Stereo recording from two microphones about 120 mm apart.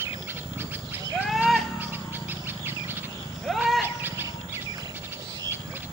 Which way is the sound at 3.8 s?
15° right (ahead or behind).